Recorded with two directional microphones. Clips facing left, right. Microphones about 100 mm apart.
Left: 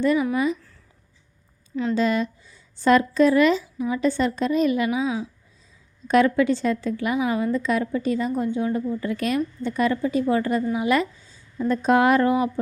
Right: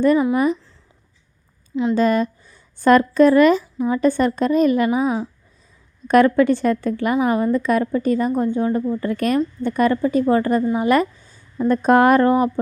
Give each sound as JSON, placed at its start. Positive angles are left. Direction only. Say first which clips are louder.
{"t": 1.7, "sound": "speech", "louder": "right 5 dB", "side_deg": -20}
{"t": 2.0, "sound": "speech", "louder": "right 4 dB", "side_deg": -45}